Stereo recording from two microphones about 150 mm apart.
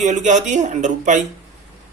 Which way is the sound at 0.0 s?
55° right (ahead or behind).